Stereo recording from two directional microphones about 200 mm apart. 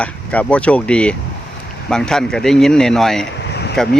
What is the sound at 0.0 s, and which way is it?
Speech, 5° left (ahead or behind).